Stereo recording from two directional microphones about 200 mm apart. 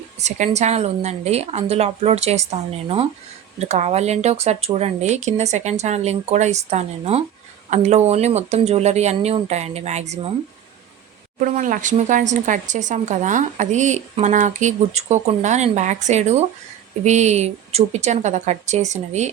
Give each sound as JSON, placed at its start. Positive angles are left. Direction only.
{"t": 0.2, "sound": "speech", "side_deg": -35}
{"t": 11.3, "sound": "speech", "side_deg": -40}